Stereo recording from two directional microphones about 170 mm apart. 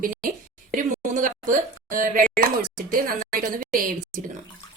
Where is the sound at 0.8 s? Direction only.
50° right (ahead or behind).